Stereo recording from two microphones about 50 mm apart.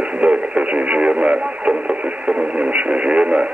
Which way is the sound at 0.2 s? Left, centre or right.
Right.